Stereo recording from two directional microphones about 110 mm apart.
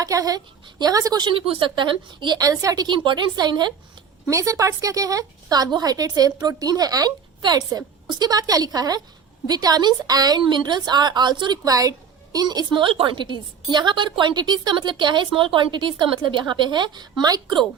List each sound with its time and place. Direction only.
0.0 s a woman's voice: 35° right (ahead or behind)
4.3 s a woman's voice: 30° right (ahead or behind)